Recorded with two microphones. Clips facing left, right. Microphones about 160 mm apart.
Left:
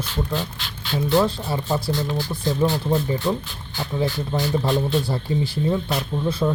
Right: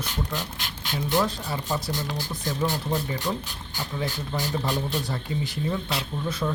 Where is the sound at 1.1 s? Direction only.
25° left (ahead or behind).